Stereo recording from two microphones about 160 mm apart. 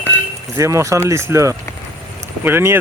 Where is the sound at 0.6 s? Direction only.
20° right (ahead or behind).